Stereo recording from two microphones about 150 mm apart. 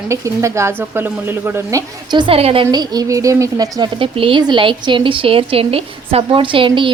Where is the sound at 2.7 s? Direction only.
25° right (ahead or behind).